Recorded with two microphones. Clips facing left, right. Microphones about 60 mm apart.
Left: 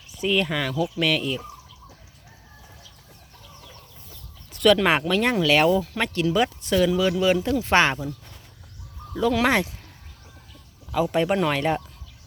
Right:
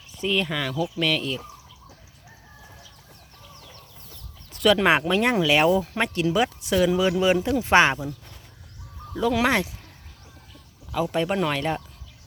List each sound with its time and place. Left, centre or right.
0.1 s speech: centre
4.5 s chicken: centre
4.8 s speech: centre
6.9 s speech: right
9.1 s speech: centre
10.9 s speech: centre